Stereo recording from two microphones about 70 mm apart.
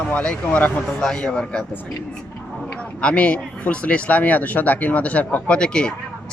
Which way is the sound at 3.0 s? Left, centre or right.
Centre.